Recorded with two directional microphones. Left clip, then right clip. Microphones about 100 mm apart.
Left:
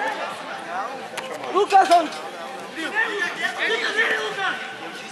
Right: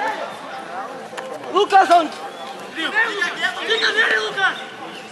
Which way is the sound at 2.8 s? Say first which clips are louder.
Right 4 dB; 20° right (ahead or behind).